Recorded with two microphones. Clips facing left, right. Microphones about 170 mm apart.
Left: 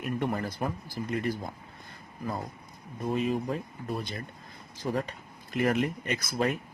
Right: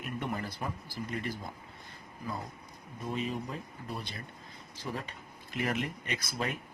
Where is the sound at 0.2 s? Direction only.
50° left (ahead or behind).